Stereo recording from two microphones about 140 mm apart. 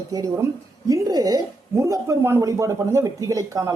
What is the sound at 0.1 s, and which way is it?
Speech, 25° right (ahead or behind).